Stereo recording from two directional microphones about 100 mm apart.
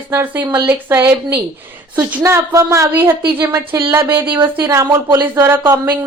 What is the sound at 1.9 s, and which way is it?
A woman's voice, 30° right (ahead or behind).